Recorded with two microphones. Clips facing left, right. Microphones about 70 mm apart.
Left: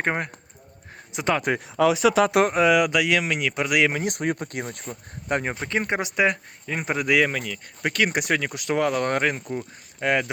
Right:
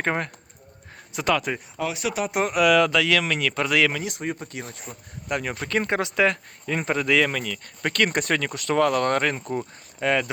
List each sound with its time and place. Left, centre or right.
0.0 s speech: centre
1.5 s speech: left
2.2 s speech: left
2.5 s speech: left
2.7 s speech: centre
4.0 s speech: left
5.3 s speech: left
5.5 s speech: left